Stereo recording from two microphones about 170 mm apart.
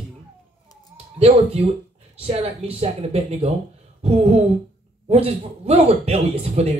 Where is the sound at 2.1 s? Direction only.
35° right (ahead or behind).